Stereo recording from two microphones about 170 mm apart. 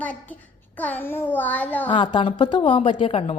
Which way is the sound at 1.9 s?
30° left (ahead or behind).